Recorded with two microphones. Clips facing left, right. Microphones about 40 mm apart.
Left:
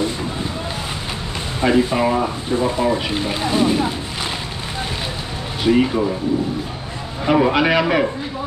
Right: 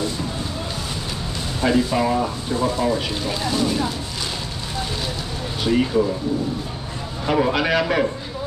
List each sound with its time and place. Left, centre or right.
1.6 s speech: left
5.6 s speech: centre
7.2 s a man's voice: centre